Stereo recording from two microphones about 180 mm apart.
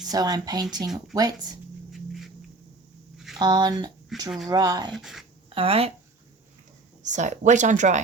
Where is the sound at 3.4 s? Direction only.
25° right (ahead or behind).